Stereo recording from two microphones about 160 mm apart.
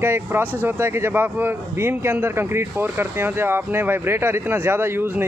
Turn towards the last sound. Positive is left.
turn(degrees=-15)  # may be behind; listen again after turning